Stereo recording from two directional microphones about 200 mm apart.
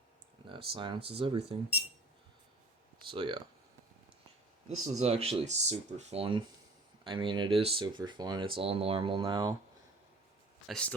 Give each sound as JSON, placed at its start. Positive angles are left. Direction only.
{"t": 0.4, "sound": "speech", "side_deg": -25}
{"t": 3.1, "sound": "speech", "side_deg": -25}
{"t": 4.8, "sound": "speech", "side_deg": -30}
{"t": 10.7, "sound": "speech", "side_deg": 5}